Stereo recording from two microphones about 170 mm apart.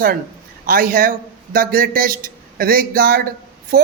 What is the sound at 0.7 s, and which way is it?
Speech, 55° right (ahead or behind).